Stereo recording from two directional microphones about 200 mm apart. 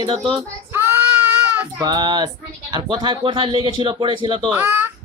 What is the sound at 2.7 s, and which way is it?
Speech, 25° right (ahead or behind).